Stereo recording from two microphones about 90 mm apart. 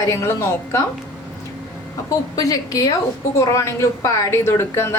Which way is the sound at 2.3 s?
40° left (ahead or behind).